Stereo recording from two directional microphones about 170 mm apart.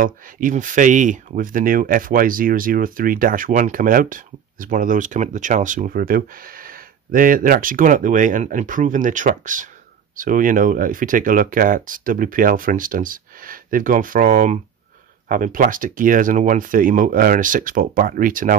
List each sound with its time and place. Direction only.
0.0 s speech: 50° right (ahead or behind)